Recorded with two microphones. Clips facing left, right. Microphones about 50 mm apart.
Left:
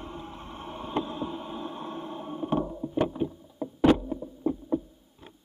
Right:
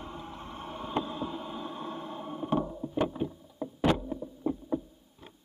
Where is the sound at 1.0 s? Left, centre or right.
Centre.